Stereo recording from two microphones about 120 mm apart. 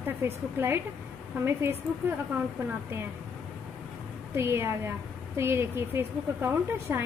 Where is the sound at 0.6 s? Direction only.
20° right (ahead or behind).